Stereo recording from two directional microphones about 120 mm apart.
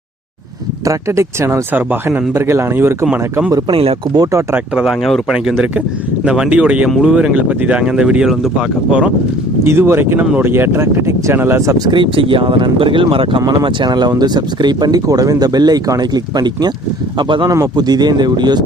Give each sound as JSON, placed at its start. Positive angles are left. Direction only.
{"t": 0.9, "sound": "speech", "side_deg": -25}
{"t": 4.1, "sound": "speech", "side_deg": -30}
{"t": 4.5, "sound": "speech", "side_deg": -5}
{"t": 9.6, "sound": "speech", "side_deg": -20}
{"t": 11.9, "sound": "speech", "side_deg": -45}
{"t": 17.5, "sound": "speech", "side_deg": -30}